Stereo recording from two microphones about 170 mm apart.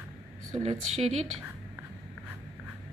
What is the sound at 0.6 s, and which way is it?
Speech, 40° right (ahead or behind).